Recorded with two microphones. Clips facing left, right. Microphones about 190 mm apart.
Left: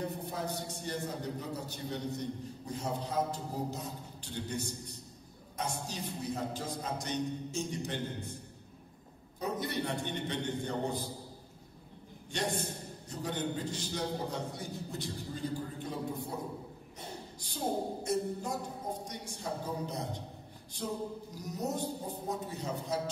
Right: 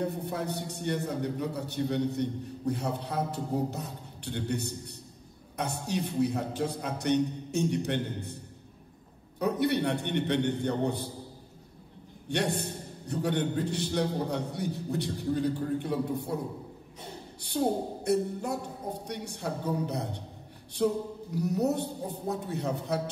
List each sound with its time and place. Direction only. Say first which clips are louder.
0.0 s a man's voice: right 5 dB; 65° right (ahead or behind)
9.4 s a man's voice: right 8 dB; 65° right (ahead or behind)
12.3 s a man's voice: right 5 dB; 65° right (ahead or behind)
17.4 s a woman's voice: right 6 dB; 65° right (ahead or behind)